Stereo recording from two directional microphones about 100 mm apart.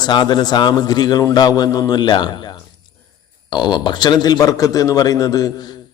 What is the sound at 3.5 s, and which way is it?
Speech, 45° left (ahead or behind).